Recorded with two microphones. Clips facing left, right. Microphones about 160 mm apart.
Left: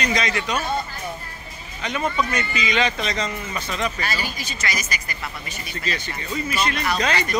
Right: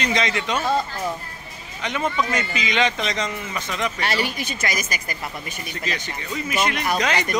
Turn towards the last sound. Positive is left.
turn(degrees=-15)  # may be behind; listen again after turning